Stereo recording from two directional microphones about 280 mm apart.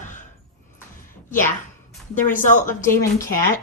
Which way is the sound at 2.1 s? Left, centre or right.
Left.